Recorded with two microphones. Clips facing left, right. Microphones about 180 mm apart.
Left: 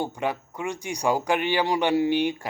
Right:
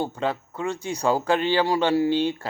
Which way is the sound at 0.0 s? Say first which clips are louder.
Right 1 dB; 15° left (ahead or behind).